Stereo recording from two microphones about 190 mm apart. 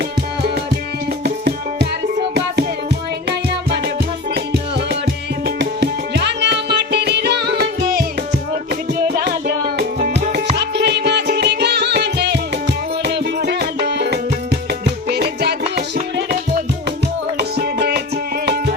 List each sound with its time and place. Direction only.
0.0 s music: 55° right (ahead or behind)
3.2 s music: 60° right (ahead or behind)